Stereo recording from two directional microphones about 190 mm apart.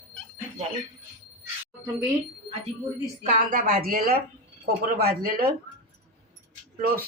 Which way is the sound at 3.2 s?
50° right (ahead or behind).